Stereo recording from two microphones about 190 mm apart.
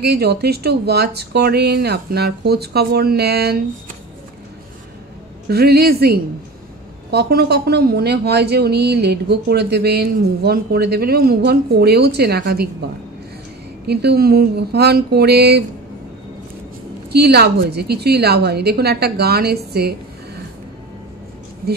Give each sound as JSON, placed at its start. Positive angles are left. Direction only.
{"t": 0.0, "sound": "speech", "side_deg": -55}
{"t": 5.5, "sound": "speech", "side_deg": -55}
{"t": 13.8, "sound": "speech", "side_deg": -55}
{"t": 17.1, "sound": "speech", "side_deg": -60}